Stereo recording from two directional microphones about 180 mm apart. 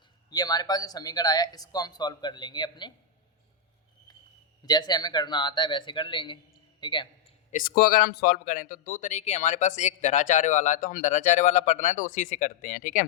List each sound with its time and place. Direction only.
0.3 s speech: 20° left (ahead or behind)
4.6 s speech: 20° left (ahead or behind)
7.5 s a man's voice: 55° left (ahead or behind)